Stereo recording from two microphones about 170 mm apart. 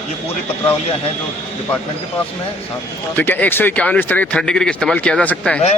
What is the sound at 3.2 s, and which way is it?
A man's voice, 10° left (ahead or behind).